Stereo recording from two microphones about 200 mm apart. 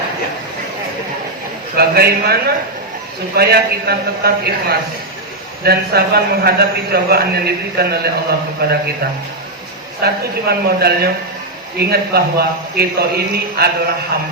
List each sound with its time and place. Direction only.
1.7 s a man's voice: 50° right (ahead or behind)
10.0 s a man's voice: 50° right (ahead or behind)